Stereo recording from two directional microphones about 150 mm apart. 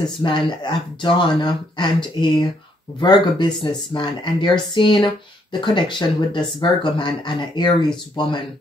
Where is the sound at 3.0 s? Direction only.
30° left (ahead or behind).